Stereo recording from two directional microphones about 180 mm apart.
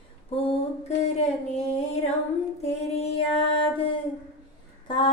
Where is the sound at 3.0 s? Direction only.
30° left (ahead or behind).